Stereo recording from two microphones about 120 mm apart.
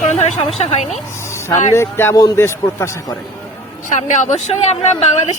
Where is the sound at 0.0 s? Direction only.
70° left (ahead or behind).